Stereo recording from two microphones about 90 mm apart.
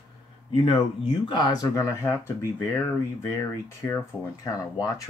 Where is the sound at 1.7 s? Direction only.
30° left (ahead or behind).